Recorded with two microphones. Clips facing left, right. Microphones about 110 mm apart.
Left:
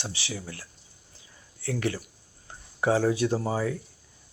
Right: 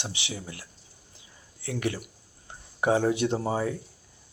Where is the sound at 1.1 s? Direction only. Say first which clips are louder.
Left 1 dB; 20° right (ahead or behind).